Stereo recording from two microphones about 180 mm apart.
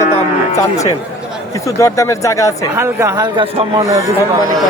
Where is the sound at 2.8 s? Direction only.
15° right (ahead or behind).